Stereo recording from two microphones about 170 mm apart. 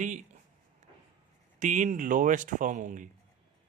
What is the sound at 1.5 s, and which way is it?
Speech, 45° right (ahead or behind).